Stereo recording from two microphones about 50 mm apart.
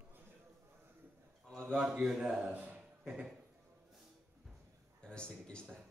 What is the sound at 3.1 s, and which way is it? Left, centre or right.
Speech, centre.